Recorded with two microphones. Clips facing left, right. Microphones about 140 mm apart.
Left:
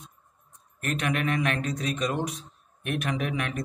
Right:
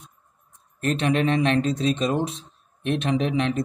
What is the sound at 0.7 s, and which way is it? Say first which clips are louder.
Speech: right 6 dB; 30° right (ahead or behind).